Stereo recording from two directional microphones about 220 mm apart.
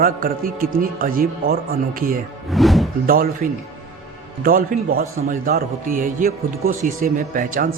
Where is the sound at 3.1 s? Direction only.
40° right (ahead or behind).